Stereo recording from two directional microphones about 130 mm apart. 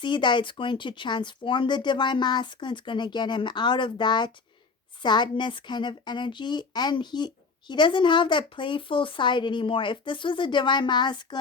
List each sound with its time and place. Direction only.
0.0 s speech: 35° left (ahead or behind)